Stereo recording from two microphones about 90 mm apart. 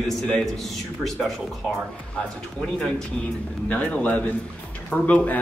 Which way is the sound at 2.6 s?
5° left (ahead or behind).